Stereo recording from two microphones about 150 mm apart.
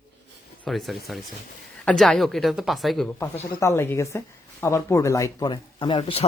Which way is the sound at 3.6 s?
20° left (ahead or behind).